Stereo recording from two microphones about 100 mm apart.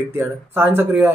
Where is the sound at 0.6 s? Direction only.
20° right (ahead or behind).